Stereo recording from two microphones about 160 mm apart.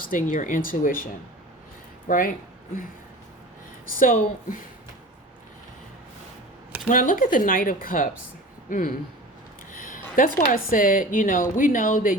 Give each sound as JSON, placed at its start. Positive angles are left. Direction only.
{"t": 0.0, "sound": "a woman's voice", "side_deg": 55}
{"t": 2.0, "sound": "a woman's voice", "side_deg": 60}
{"t": 4.0, "sound": "speech", "side_deg": 55}
{"t": 6.8, "sound": "a woman's voice", "side_deg": 55}
{"t": 9.7, "sound": "a sound", "side_deg": 55}
{"t": 10.5, "sound": "a woman's voice", "side_deg": 60}